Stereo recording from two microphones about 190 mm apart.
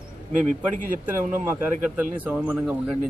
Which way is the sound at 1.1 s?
10° right (ahead or behind).